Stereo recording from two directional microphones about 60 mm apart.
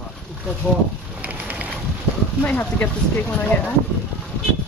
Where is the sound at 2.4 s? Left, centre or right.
Left.